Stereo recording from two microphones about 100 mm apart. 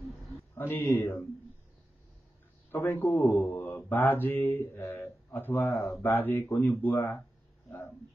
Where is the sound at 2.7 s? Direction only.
20° left (ahead or behind).